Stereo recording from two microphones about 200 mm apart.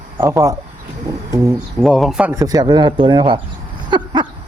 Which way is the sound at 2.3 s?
20° right (ahead or behind).